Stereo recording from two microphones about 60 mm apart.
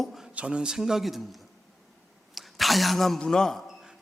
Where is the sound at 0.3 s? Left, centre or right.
Centre.